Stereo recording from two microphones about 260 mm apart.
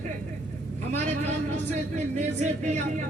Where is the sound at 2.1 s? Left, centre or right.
Right.